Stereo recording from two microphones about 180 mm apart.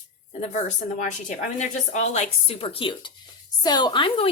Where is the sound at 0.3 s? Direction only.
40° left (ahead or behind).